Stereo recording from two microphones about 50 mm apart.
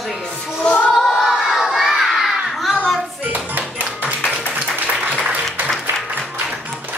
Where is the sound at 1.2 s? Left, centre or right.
Centre.